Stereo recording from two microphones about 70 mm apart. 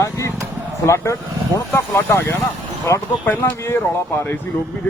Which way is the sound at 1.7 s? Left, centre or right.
Left.